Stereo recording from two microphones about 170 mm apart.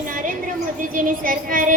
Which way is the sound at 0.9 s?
55° right (ahead or behind).